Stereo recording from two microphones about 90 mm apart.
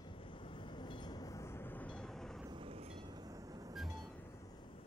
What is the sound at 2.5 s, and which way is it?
Train, 85° right.